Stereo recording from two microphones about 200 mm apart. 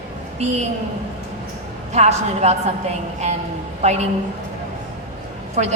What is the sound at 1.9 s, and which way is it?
A woman's voice, 35° right (ahead or behind).